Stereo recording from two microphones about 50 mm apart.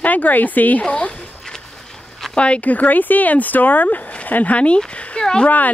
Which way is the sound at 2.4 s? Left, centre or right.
Left.